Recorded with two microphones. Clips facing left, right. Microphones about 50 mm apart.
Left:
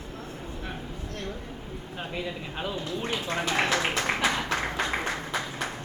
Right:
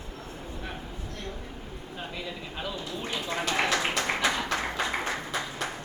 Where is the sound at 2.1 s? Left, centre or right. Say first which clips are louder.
Left 6 dB; centre.